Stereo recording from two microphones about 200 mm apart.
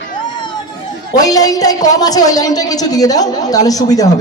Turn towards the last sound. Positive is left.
turn(degrees=20)  # may be behind; listen again after turning